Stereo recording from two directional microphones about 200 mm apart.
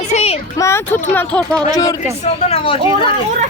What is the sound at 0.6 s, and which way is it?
Speech, 15° left (ahead or behind).